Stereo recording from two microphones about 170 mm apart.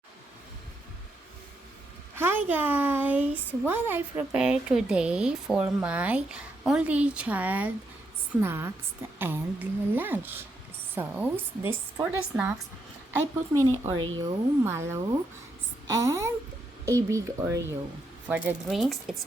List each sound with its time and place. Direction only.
2.1 s a woman's voice: 10° right (ahead or behind)